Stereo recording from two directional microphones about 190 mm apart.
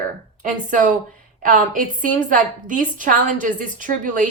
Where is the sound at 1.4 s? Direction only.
45° right (ahead or behind).